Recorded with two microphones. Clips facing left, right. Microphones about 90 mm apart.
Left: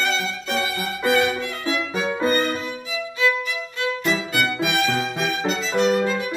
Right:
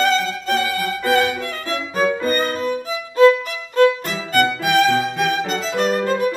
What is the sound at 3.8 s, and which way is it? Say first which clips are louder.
Violin: right 9 dB; 45° right (ahead or behind).